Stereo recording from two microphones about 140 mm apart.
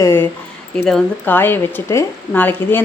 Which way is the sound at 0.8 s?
5° left (ahead or behind).